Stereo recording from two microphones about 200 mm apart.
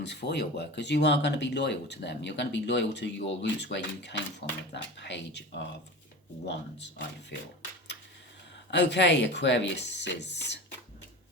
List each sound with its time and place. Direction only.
0.0 s speech: 60° left (ahead or behind)
8.7 s speech: 60° left (ahead or behind)